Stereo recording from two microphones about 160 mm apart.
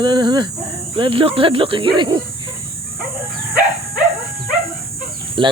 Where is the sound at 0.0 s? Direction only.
30° right (ahead or behind).